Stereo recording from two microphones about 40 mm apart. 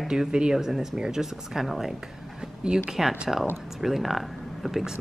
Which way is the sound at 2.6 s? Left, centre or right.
Centre.